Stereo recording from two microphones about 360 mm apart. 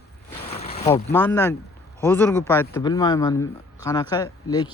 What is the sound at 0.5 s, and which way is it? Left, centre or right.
Boat, centre.